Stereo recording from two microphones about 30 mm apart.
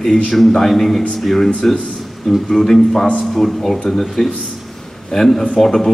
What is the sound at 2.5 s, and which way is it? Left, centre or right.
Speech, centre.